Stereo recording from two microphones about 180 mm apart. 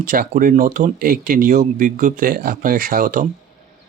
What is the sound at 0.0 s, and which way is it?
Speech, 50° right (ahead or behind).